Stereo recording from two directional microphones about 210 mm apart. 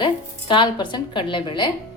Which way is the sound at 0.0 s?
20° left (ahead or behind).